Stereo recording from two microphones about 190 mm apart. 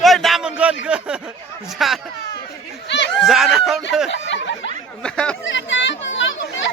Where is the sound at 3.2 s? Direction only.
Centre (ahead or behind).